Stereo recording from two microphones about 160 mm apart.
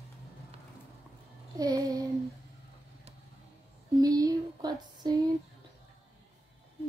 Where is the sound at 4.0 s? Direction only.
25° right (ahead or behind).